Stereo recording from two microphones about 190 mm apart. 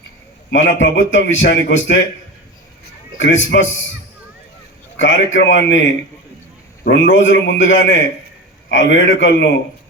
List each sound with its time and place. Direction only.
0.5 s a man's voice: 70° left (ahead or behind)
3.2 s a man's voice: 70° left (ahead or behind)
4.9 s a man's voice: 75° left (ahead or behind)
6.8 s a man's voice: 70° left (ahead or behind)